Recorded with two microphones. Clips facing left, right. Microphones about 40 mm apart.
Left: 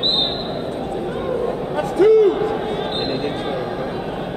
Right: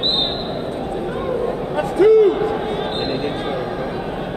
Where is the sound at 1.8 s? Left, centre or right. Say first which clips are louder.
Right 1 dB; centre.